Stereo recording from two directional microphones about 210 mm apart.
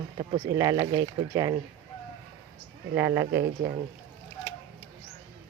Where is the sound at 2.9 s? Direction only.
10° right (ahead or behind).